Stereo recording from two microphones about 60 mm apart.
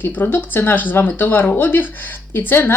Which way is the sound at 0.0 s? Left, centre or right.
Left.